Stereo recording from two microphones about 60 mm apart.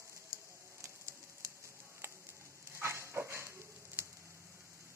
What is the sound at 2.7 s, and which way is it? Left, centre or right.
Dog, right.